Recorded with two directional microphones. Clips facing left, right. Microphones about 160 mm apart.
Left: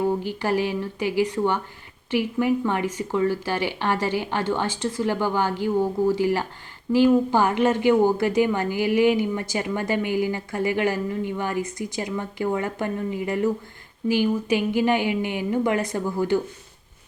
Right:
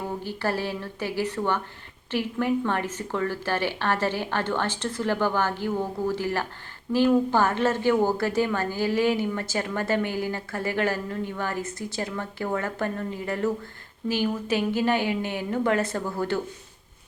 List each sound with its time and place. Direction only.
0.2 s a woman's voice: 15° left (ahead or behind)